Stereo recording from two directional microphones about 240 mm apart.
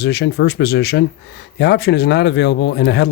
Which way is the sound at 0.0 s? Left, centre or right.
Left.